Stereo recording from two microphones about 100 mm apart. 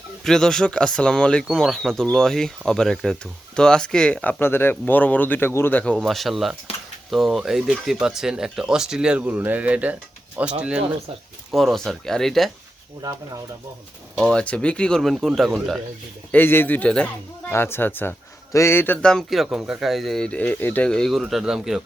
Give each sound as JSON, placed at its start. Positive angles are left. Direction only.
{"t": 0.3, "sound": "speech", "side_deg": 5}
{"t": 6.0, "sound": "speech", "side_deg": 0}
{"t": 6.7, "sound": "a sound", "side_deg": 85}
{"t": 7.1, "sound": "speech", "side_deg": 0}
{"t": 11.5, "sound": "speech", "side_deg": 0}
{"t": 13.0, "sound": "speech", "side_deg": -35}
{"t": 14.2, "sound": "speech", "side_deg": 10}
{"t": 16.3, "sound": "speech", "side_deg": 20}
{"t": 17.5, "sound": "speech", "side_deg": 25}
{"t": 19.0, "sound": "speech", "side_deg": 5}